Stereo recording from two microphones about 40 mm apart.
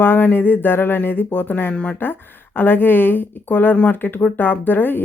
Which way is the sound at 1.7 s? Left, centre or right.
Left.